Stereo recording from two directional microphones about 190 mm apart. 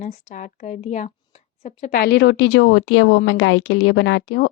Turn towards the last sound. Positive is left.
turn(degrees=75)  # may be behind; listen again after turning